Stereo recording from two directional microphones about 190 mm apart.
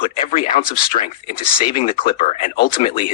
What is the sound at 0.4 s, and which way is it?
Speech, 50° left (ahead or behind).